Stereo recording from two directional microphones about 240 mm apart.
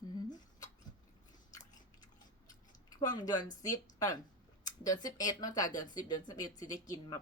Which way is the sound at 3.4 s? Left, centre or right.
Left.